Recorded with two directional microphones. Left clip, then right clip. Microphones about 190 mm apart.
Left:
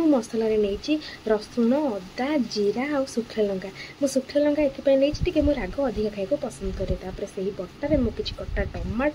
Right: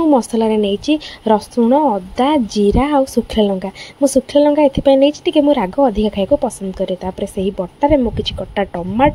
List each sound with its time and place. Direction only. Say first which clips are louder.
0.1 s speech: right 9 dB; 35° right (ahead or behind)